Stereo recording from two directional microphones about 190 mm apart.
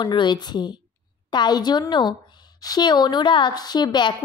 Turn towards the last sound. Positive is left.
turn(degrees=20)  # may be behind; listen again after turning